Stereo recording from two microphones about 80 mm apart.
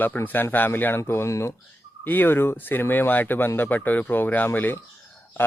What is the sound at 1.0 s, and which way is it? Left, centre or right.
Speech, left.